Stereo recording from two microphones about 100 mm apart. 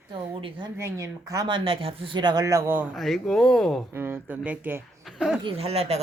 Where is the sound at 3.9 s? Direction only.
25° right (ahead or behind).